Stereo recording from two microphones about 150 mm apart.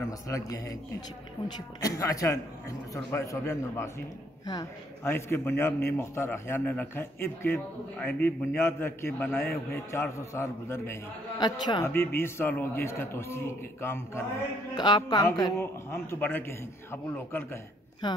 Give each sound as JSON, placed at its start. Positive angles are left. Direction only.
{"t": 0.3, "sound": "a man's voice", "side_deg": 25}
{"t": 5.0, "sound": "a man's voice", "side_deg": 15}
{"t": 11.4, "sound": "a man's voice", "side_deg": 25}
{"t": 11.8, "sound": "a man's voice", "side_deg": 15}
{"t": 14.8, "sound": "a man's voice", "side_deg": 30}